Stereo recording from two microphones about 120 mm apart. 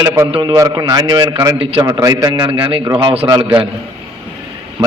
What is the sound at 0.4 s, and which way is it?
A man's voice, 30° right (ahead or behind).